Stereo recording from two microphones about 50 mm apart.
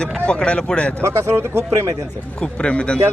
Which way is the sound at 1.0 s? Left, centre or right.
Right.